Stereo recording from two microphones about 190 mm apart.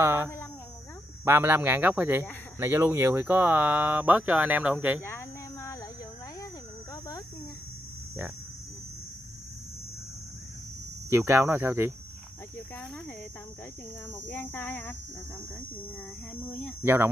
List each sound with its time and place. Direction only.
0.0 s a sound: 15° right (ahead or behind)
1.2 s speech: 10° right (ahead or behind)
5.0 s a sound: 15° left (ahead or behind)
6.9 s cricket: 20° left (ahead or behind)
11.1 s speech: 15° right (ahead or behind)
14.1 s speech: 10° left (ahead or behind)
16.8 s speech: 15° right (ahead or behind)